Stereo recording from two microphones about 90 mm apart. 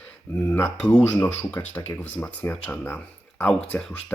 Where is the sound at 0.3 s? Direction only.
20° left (ahead or behind).